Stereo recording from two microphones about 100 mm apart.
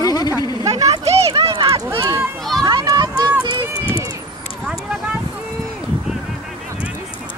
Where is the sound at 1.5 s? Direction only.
45° right (ahead or behind).